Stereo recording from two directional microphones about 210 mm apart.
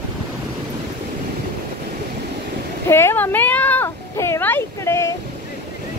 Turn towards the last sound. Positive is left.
turn(degrees=10)  # may be behind; listen again after turning